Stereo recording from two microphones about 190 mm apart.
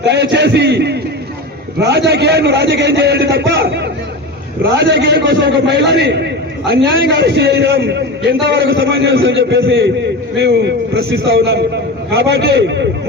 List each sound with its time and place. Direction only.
0.0 s a man's voice: 65° right (ahead or behind)
10.3 s a man's voice: 65° right (ahead or behind)